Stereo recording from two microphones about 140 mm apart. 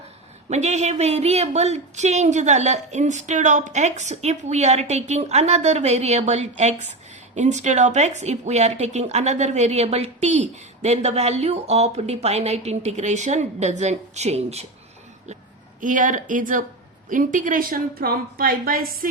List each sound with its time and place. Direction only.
0.5 s speech: 55° right (ahead or behind)
15.8 s a woman's voice: 70° right (ahead or behind); by 19.0 s 90° right